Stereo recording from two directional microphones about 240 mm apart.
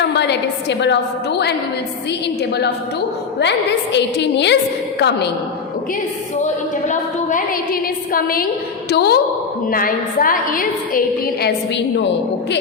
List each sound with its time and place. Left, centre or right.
0.1 s a woman's voice: left
6.4 s a woman's voice: left